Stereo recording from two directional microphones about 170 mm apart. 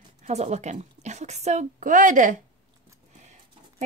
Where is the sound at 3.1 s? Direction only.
45° right (ahead or behind).